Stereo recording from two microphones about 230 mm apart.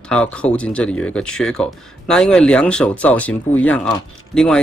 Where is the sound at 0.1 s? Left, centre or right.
Centre.